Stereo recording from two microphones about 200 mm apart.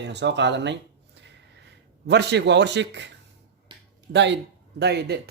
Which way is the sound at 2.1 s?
60° right (ahead or behind).